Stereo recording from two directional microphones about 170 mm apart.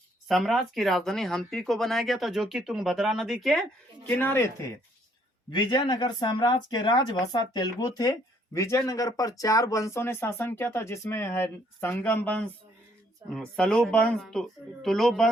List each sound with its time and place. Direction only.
0.3 s speech: centre (ahead or behind)
4.0 s speech: 10° left (ahead or behind)
5.5 s speech: 25° left (ahead or behind); by 15.3 s centre (ahead or behind)